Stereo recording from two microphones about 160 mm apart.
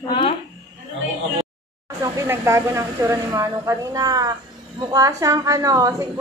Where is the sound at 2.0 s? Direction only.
15° right (ahead or behind).